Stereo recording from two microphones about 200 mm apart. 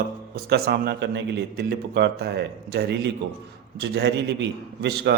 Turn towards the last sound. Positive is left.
turn(degrees=-55)  # may be behind; listen again after turning